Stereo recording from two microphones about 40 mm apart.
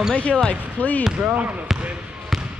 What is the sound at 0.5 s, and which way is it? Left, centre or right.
Speech, left.